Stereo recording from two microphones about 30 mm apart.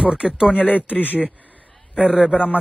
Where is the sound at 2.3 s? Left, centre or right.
Left.